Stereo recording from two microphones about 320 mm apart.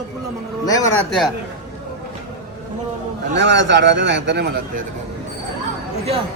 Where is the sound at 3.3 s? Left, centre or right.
Right.